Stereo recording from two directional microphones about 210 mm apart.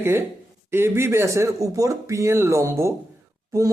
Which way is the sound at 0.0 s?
10° right (ahead or behind).